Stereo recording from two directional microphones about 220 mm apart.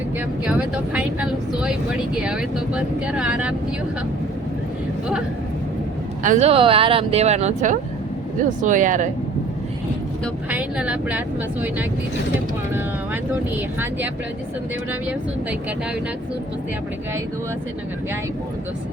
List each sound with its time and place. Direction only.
0.4 s speech: 5° right (ahead or behind)
6.2 s speech: 30° right (ahead or behind)
10.5 s speech: 5° right (ahead or behind)
13.3 s speech: 10° right (ahead or behind)